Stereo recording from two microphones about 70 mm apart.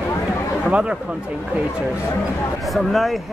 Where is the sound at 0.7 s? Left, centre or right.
Centre.